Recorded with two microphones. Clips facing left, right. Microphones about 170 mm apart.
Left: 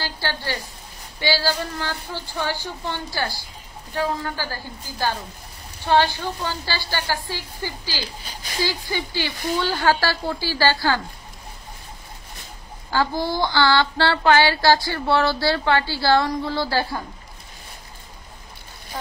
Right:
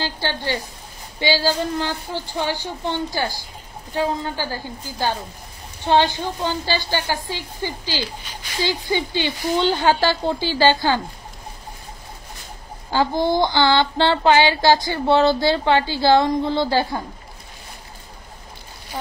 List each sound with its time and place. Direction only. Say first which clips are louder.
0.0 s child singing: right 3 dB; 20° right (ahead or behind)
1.2 s speech: right 3 dB; 15° right (ahead or behind)
5.9 s child singing: right 1 dB; 20° right (ahead or behind)
8.2 s a child's voice: even; 35° left (ahead or behind)
8.6 s child singing: right 7 dB; 20° right (ahead or behind)
12.9 s child singing: right 4 dB; 20° right (ahead or behind)